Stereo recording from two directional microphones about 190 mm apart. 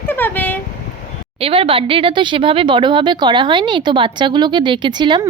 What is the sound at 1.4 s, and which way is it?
A woman's voice, 30° right (ahead or behind).